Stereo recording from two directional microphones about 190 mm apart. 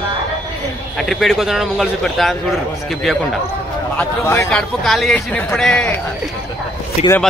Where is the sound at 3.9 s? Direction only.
15° left (ahead or behind).